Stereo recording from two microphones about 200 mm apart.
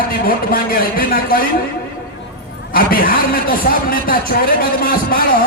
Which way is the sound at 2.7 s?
45° left (ahead or behind).